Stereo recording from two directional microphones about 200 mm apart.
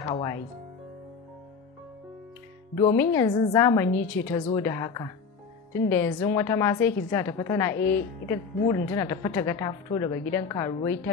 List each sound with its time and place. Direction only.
0.0 s speech: 15° left (ahead or behind)
2.8 s a woman's voice: 15° left (ahead or behind)